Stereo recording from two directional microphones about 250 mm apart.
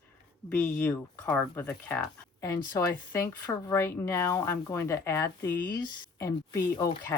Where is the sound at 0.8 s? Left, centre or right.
Centre.